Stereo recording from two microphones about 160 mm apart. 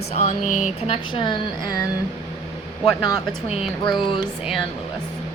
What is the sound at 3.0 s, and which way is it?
Speech, 25° left (ahead or behind).